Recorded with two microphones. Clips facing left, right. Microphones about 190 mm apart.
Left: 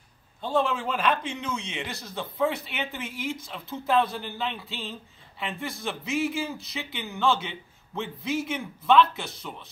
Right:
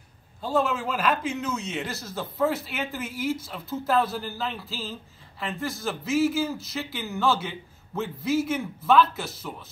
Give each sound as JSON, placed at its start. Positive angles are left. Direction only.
{"t": 0.4, "sound": "a man's voice", "side_deg": -5}